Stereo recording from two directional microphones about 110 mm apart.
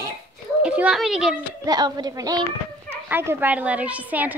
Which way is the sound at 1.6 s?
40° right (ahead or behind).